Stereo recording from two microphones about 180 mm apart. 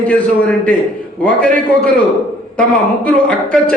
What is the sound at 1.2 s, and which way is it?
Speech, 5° left (ahead or behind).